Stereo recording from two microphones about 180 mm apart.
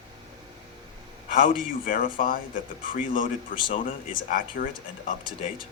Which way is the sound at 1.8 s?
50° left (ahead or behind).